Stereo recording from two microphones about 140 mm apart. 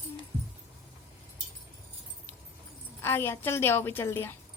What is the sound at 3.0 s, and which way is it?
A woman's voice, 15° left (ahead or behind).